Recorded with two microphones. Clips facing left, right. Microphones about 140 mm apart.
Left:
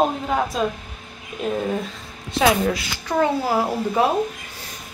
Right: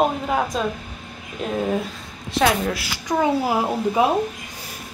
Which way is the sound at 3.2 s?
15° right (ahead or behind).